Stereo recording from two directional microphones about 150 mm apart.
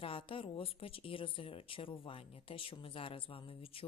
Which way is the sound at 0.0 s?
35° left (ahead or behind).